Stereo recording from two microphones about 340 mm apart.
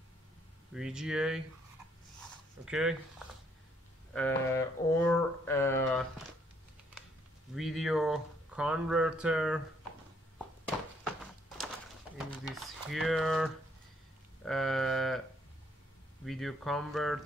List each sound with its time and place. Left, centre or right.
0.7 s speech: centre
2.6 s speech: centre
4.1 s a sound: centre
7.5 s speech: centre
12.4 s speech: centre
16.3 s speech: centre